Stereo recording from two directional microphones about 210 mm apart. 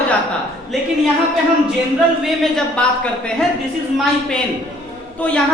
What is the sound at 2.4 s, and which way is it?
Speech, 5° left (ahead or behind).